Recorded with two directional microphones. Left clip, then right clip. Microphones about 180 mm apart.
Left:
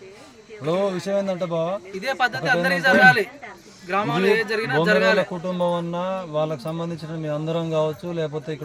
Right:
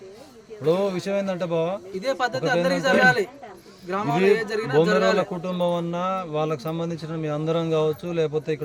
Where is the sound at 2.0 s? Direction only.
90° right.